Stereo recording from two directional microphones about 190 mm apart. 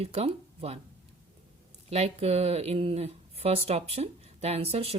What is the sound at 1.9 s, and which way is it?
Speech, 35° right (ahead or behind).